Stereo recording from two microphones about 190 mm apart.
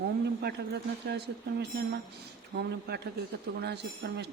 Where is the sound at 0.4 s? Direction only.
60° right (ahead or behind).